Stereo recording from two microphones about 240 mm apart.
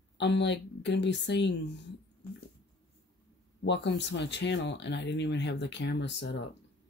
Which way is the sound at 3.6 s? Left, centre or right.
Left.